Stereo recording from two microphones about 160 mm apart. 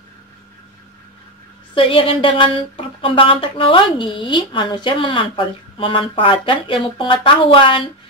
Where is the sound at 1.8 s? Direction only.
35° left (ahead or behind).